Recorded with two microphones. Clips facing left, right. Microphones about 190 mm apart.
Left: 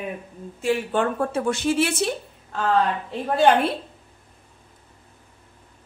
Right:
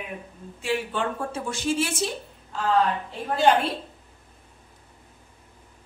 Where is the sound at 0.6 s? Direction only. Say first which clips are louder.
Left 5 dB; 50° left (ahead or behind).